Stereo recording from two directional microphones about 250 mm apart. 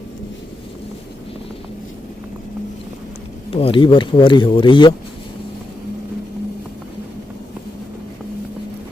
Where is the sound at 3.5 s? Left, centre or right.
Left.